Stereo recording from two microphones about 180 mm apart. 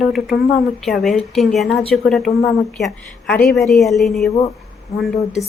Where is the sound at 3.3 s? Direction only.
Centre (ahead or behind).